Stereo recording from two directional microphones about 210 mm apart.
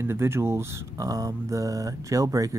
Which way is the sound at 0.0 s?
10° right (ahead or behind).